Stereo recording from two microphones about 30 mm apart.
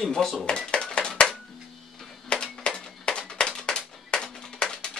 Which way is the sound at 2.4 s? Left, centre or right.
Left.